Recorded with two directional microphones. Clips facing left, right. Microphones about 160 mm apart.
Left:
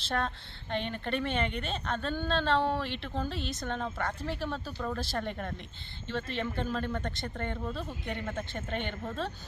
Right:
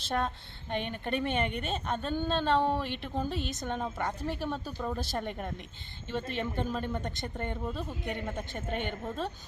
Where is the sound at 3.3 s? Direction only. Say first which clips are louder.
Right 2 dB; 45° right (ahead or behind).